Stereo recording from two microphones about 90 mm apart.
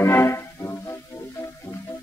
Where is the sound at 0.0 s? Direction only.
30° left (ahead or behind).